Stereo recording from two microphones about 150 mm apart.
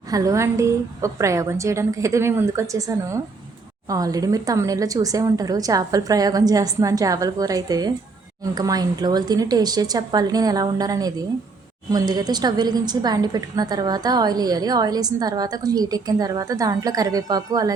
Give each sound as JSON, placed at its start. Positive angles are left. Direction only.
{"t": 0.1, "sound": "a woman's voice", "side_deg": -20}